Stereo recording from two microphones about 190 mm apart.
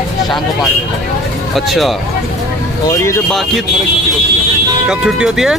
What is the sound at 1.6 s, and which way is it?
Speech, centre (ahead or behind).